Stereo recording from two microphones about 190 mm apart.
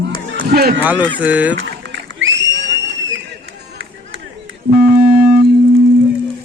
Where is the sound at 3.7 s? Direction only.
80° right.